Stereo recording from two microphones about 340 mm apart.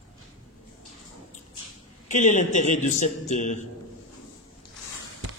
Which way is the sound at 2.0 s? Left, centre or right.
Left.